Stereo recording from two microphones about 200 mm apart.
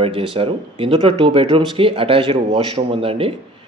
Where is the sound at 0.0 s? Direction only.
25° right (ahead or behind).